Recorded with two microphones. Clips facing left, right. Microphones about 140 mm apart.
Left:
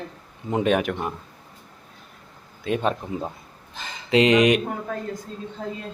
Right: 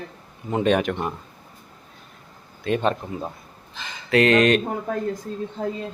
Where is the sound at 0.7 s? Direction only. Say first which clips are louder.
Right 1 dB; 5° left (ahead or behind).